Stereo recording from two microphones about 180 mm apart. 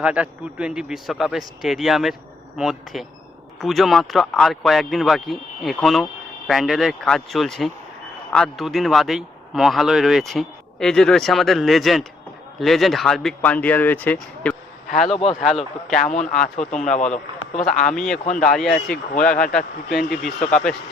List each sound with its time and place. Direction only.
0.0 s speech: 5° right (ahead or behind)
17.5 s speech: 45° left (ahead or behind)
17.8 s speech: 5° left (ahead or behind)